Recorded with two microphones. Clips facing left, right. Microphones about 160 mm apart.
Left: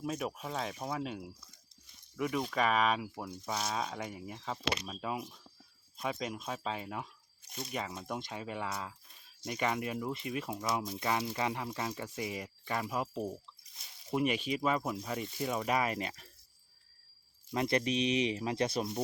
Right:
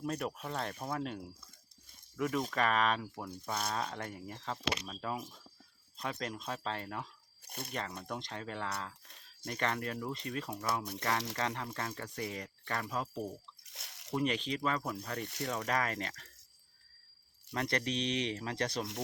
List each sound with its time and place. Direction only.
0.0 s speech: 5° left (ahead or behind)
7.4 s speech: 55° right (ahead or behind)
7.7 s speech: 5° left (ahead or behind)
9.0 s a sound: 75° right (ahead or behind)
9.5 s speech: 10° left (ahead or behind)
13.7 s drip: 75° right (ahead or behind)
14.1 s speech: 10° left (ahead or behind)
15.2 s speech: 70° right (ahead or behind)
15.4 s speech: 10° left (ahead or behind)
17.5 s speech: 10° left (ahead or behind)